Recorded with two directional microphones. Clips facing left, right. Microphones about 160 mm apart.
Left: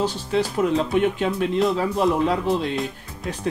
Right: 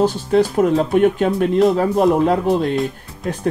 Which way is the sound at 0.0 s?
50° right (ahead or behind).